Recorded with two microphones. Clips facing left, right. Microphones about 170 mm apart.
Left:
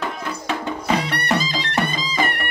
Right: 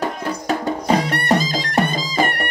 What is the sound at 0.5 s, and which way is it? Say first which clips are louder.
Music: right 4 dB; 40° right (ahead or behind).